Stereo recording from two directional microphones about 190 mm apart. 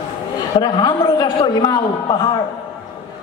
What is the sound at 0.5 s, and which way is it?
A man's voice, 25° left (ahead or behind).